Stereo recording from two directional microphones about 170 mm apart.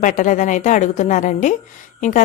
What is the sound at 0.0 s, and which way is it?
A woman's voice, 50° left (ahead or behind).